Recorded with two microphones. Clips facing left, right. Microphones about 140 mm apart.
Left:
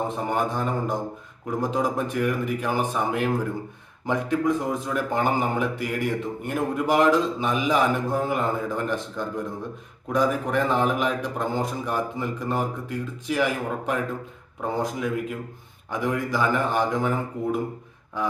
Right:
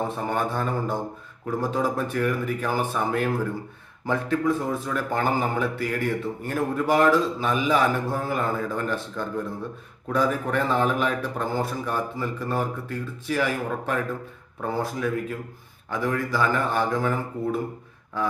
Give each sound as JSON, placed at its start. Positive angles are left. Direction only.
{"t": 0.3, "sound": "speech", "side_deg": 15}